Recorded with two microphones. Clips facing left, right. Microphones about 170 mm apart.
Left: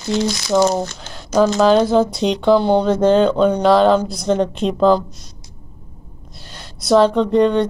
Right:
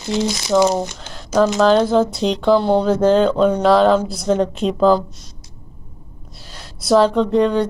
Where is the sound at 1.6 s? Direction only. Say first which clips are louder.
Left 1 dB; centre (ahead or behind).